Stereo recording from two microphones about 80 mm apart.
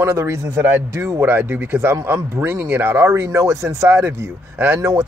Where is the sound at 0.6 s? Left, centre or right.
Right.